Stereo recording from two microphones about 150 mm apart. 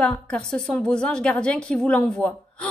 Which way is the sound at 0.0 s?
5° left (ahead or behind).